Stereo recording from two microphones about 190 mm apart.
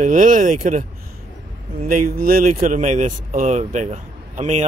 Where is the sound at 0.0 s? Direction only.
40° right (ahead or behind).